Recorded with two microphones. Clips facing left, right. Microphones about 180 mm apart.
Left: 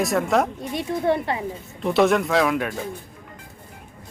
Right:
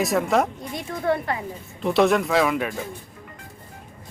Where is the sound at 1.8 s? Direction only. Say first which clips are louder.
Even; centre (ahead or behind).